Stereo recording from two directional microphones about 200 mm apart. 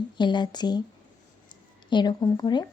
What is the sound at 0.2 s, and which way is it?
A woman's voice, 20° left (ahead or behind).